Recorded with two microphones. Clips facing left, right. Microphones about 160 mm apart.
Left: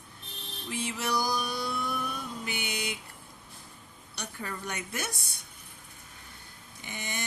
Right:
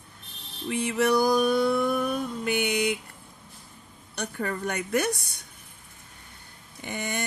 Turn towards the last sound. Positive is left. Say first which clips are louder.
# right 7 dB
turn(degrees=-55)  # may be behind; listen again after turning